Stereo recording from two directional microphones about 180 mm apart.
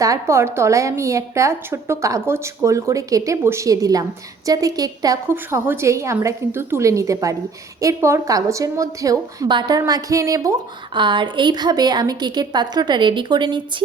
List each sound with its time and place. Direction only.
0.0 s a woman's voice: 15° right (ahead or behind)